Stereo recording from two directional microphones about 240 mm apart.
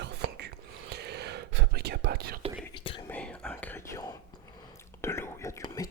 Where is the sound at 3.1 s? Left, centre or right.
Centre.